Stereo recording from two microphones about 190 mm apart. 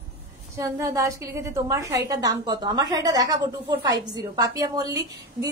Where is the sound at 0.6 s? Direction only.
15° right (ahead or behind).